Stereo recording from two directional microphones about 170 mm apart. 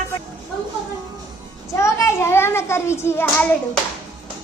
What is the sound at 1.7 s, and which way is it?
Hands, 15° left (ahead or behind).